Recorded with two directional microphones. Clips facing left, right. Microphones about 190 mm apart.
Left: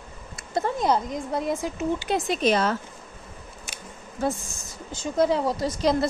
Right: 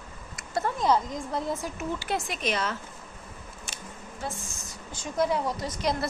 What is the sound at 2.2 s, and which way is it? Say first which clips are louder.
Speech: left 8 dB; 35° left (ahead or behind).